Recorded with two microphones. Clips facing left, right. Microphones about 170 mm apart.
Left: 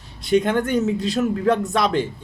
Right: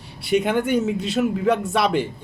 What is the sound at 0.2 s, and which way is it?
A man's voice, 10° right (ahead or behind).